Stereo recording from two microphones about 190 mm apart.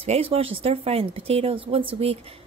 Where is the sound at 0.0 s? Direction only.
30° right (ahead or behind).